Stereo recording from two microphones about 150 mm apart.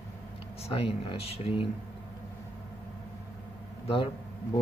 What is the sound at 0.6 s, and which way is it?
Speech, 40° left (ahead or behind).